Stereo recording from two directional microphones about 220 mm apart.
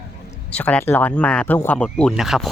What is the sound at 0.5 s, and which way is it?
Speech, 5° left (ahead or behind).